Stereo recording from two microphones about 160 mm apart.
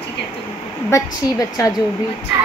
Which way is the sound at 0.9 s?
20° left (ahead or behind).